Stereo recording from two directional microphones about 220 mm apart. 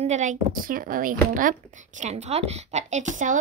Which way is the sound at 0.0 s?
35° right (ahead or behind).